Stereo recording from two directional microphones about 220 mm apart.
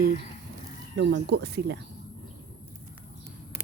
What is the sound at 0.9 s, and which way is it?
Speech, 50° right (ahead or behind).